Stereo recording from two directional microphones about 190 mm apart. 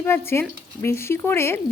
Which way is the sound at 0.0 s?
10° left (ahead or behind).